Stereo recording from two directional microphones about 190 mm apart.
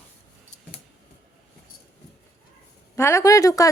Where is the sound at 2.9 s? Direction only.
15° left (ahead or behind).